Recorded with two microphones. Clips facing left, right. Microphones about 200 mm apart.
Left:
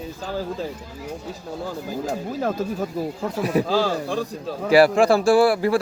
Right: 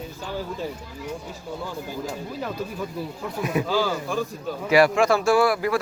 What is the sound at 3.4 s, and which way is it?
A man's voice, 35° left (ahead or behind).